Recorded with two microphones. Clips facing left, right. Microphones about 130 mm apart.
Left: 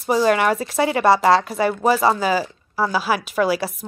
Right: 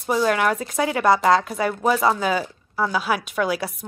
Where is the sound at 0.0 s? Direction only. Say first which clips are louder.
Left 3 dB; 5° left (ahead or behind).